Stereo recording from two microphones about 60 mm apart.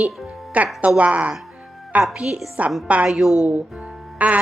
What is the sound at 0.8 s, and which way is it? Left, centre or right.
A woman's voice, right.